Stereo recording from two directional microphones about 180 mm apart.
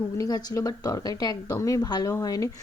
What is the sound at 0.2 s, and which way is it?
Speech, 20° left (ahead or behind).